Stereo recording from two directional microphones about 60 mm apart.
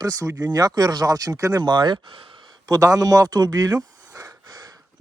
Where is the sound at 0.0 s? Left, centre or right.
Right.